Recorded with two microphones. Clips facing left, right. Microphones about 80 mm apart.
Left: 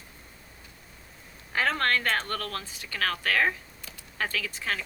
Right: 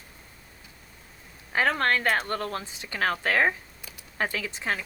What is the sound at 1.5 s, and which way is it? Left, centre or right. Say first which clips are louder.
Speech: right 2 dB; centre.